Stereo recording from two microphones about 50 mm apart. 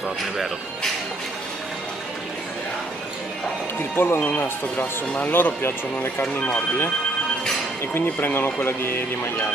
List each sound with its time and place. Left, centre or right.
3.9 s speech: left
4.2 s speech: left
7.9 s speech: left